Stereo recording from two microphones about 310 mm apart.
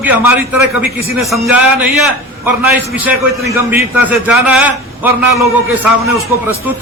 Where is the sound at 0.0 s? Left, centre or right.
Centre.